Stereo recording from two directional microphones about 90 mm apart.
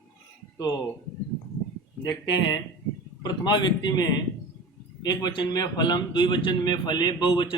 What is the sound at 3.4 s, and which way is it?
A man's voice, 55° left (ahead or behind).